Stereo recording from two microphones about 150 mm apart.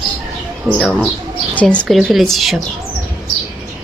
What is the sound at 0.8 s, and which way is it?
Speech, 5° left (ahead or behind).